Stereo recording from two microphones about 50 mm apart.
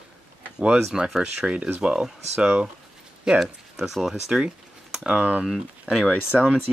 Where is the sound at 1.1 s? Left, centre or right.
Centre.